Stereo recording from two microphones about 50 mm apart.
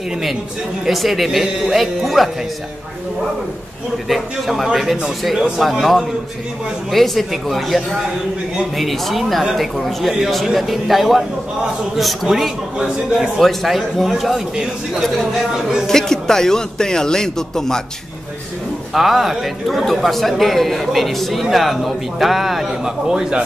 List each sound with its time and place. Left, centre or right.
0.8 s speech: centre
4.1 s speech: centre
6.9 s speech: centre
12.7 s a man's voice: centre
13.4 s speech: centre
15.9 s a man's voice: centre
18.9 s speech: centre